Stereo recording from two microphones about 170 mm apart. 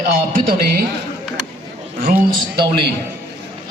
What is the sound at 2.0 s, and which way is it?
Speech, 55° right (ahead or behind).